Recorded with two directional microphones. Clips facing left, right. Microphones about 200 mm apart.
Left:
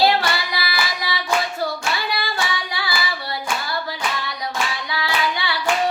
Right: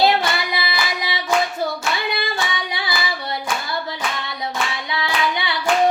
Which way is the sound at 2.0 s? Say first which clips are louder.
Right 1 dB; 20° right (ahead or behind).